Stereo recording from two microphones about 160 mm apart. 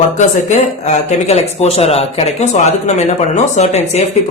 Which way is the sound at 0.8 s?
45° left (ahead or behind).